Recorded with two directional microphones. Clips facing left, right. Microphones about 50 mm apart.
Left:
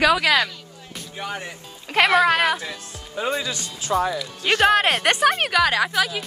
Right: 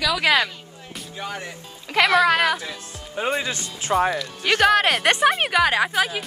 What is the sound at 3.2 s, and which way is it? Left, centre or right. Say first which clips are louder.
Speech: right 1 dB; right.